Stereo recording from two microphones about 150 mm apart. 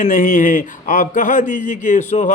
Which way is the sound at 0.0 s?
65° left (ahead or behind).